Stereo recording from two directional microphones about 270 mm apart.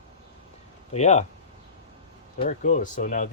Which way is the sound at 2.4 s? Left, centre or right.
Left.